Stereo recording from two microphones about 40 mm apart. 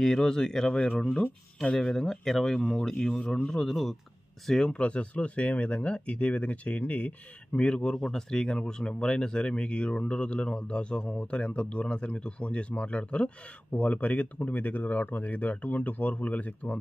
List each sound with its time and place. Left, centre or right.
0.0 s speech: centre
2.9 s speech: centre
3.5 s speech: centre
4.5 s speech: centre
4.7 s speech: left
14.5 s speech: left